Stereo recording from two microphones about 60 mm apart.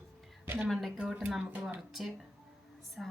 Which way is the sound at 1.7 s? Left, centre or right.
Centre.